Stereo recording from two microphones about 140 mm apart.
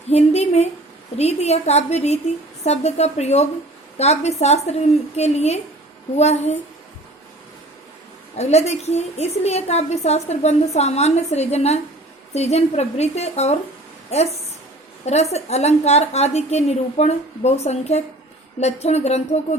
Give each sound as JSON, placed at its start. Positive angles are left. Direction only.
{"t": 0.1, "sound": "a woman's voice", "side_deg": 50}
{"t": 8.4, "sound": "a woman's voice", "side_deg": 50}
{"t": 15.0, "sound": "a woman's voice", "side_deg": 50}